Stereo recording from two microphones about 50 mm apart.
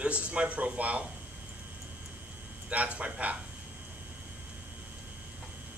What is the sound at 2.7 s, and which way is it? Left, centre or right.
Speech, right.